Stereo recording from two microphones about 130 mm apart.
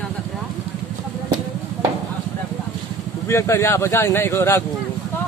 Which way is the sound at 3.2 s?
20° left (ahead or behind).